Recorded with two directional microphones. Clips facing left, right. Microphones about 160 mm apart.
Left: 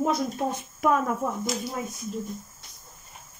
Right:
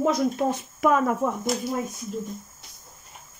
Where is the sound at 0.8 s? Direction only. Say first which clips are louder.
Right 2 dB; 90° right.